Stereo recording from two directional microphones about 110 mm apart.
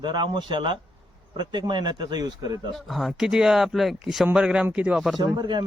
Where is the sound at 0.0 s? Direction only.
40° right (ahead or behind).